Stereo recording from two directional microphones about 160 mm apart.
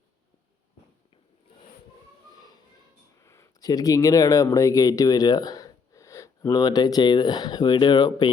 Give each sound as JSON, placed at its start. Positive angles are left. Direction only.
{"t": 3.2, "sound": "speech", "side_deg": 20}